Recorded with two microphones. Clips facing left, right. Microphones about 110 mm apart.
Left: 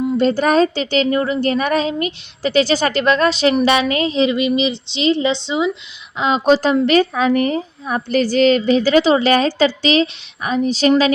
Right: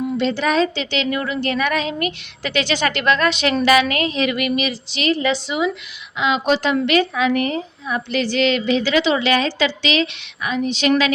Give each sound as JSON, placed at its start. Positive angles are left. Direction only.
{"t": 0.2, "sound": "a woman's voice", "side_deg": 45}
{"t": 6.1, "sound": "a woman's voice", "side_deg": 35}